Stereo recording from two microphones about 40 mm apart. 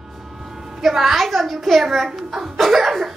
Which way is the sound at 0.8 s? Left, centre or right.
Centre.